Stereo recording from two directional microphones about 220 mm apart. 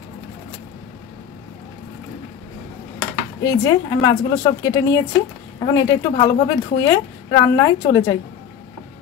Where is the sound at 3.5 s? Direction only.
15° left (ahead or behind).